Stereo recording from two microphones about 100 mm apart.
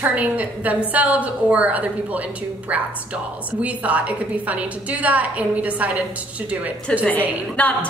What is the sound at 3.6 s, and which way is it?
A woman's voice, 15° right (ahead or behind).